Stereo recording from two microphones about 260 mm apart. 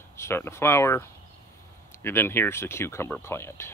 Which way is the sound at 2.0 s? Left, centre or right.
Centre.